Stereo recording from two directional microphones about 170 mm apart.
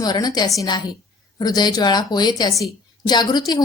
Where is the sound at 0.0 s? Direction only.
25° left (ahead or behind).